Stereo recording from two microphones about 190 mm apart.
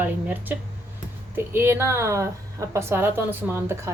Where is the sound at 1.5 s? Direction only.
10° right (ahead or behind).